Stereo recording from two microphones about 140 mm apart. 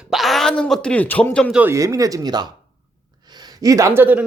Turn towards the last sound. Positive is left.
turn(degrees=-15)  # may be behind; listen again after turning